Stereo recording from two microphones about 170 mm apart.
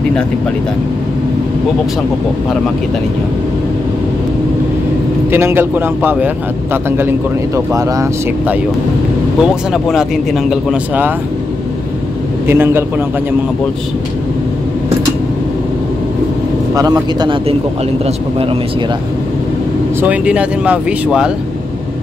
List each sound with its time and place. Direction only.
5.3 s speech: 15° right (ahead or behind)
9.4 s speech: 5° right (ahead or behind)
12.4 s speech: 15° right (ahead or behind)
16.7 s a man's voice: 20° right (ahead or behind)
20.0 s speech: 10° right (ahead or behind)